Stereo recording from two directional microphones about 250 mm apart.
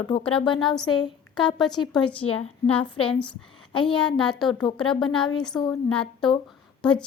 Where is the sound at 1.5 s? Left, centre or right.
Centre.